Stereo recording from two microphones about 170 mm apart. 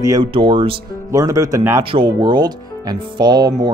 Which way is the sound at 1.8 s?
30° right (ahead or behind).